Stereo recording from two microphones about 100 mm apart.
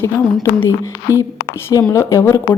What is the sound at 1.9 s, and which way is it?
Speech, 30° left (ahead or behind).